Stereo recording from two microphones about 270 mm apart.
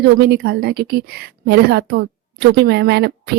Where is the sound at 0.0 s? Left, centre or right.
Right.